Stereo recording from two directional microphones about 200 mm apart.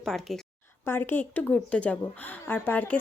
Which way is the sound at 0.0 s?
Centre (ahead or behind).